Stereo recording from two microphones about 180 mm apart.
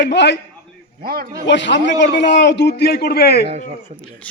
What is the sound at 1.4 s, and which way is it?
A man's voice, 80° left.